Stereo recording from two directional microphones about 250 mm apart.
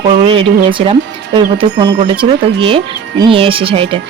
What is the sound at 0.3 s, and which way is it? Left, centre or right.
Speech, right.